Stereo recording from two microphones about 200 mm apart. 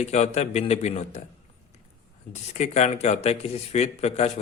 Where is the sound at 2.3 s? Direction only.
35° left (ahead or behind).